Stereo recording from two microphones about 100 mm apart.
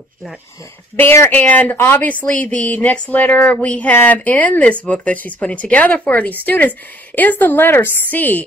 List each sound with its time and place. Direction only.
0.9 s speech: 25° left (ahead or behind)